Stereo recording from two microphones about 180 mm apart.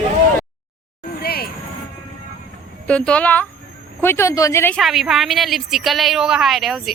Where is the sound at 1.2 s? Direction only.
60° left (ahead or behind).